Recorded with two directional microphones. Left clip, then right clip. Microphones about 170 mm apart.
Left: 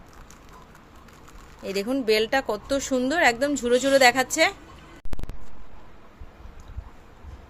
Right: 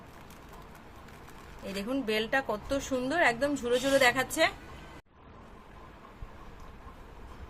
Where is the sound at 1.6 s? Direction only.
50° left (ahead or behind).